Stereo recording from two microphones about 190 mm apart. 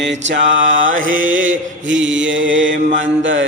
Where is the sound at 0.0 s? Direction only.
70° right (ahead or behind).